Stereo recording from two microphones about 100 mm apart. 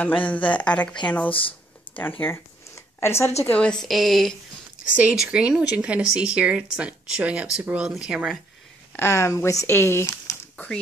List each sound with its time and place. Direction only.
0.0 s a woman's voice: 15° left (ahead or behind)
3.4 s a woman's voice: 15° left (ahead or behind)
3.8 s speech: centre (ahead or behind)
8.9 s speech: 25° left (ahead or behind)